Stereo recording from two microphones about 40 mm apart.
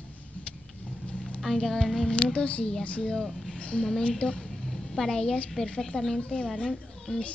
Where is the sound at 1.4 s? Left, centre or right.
Centre.